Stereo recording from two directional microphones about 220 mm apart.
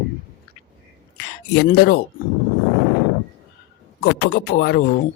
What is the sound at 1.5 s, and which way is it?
Speech, 50° left (ahead or behind).